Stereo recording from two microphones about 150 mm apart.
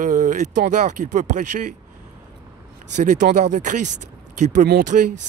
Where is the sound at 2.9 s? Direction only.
55° right (ahead or behind).